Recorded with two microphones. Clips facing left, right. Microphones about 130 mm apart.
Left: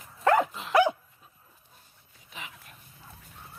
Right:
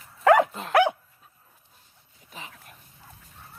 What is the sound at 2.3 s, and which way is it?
Dog, 35° right (ahead or behind).